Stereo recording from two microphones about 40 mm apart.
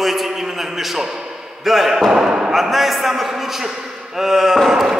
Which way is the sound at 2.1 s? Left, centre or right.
Right.